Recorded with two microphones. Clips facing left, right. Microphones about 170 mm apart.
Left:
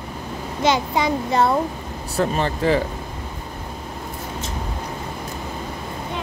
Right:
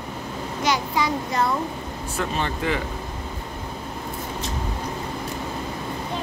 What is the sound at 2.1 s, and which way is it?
Speech, 35° left (ahead or behind).